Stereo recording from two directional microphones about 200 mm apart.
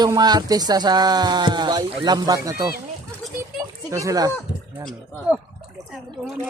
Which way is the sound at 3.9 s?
15° right (ahead or behind).